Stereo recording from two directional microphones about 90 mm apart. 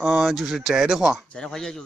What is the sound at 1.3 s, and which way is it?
Speech, 5° left (ahead or behind).